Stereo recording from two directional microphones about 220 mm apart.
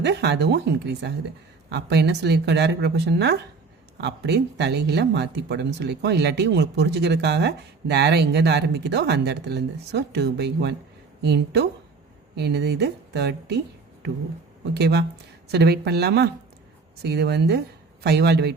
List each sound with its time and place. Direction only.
0.0 s speech: 50° right (ahead or behind)
14.7 s speech: 50° right (ahead or behind)